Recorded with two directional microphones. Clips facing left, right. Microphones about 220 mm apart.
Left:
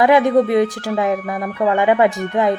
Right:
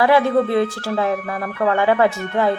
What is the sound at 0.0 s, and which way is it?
Speech, 20° left (ahead or behind).